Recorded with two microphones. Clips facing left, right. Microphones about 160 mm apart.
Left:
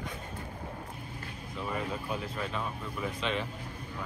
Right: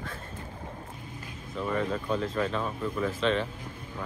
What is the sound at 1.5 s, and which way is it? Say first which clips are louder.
Speech: right 6 dB; 35° right (ahead or behind).